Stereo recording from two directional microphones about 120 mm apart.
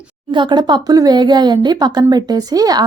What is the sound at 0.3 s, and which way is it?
A woman's voice, 40° right (ahead or behind).